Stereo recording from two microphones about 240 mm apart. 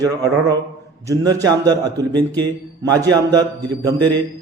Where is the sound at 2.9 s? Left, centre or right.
Centre.